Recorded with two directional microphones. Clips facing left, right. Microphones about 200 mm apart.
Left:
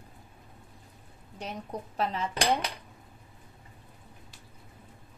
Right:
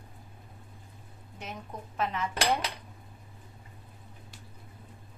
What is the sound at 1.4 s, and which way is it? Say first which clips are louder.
Speech: left 4 dB; 35° left (ahead or behind).